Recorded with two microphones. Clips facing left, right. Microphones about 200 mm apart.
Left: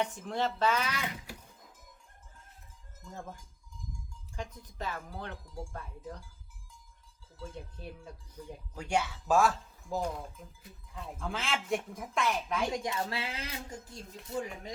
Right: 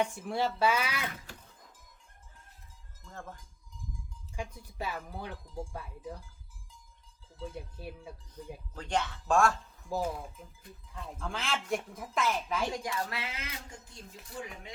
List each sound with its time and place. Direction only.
0.0 s speech: 10° right (ahead or behind)
4.4 s speech: 10° right (ahead or behind)
7.5 s speech: 10° right (ahead or behind)
8.7 s speech: 10° left (ahead or behind)
12.7 s speech: 25° left (ahead or behind)